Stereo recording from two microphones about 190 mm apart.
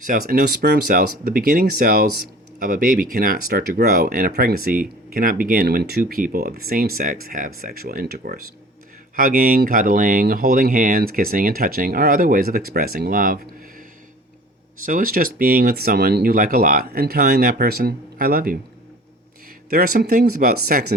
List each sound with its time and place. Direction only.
0.0 s speech: 50° right (ahead or behind)
14.8 s speech: 45° right (ahead or behind)
19.7 s speech: 55° right (ahead or behind)